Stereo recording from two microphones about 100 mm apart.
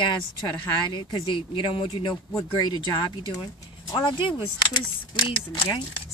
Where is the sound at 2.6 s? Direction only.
45° left (ahead or behind).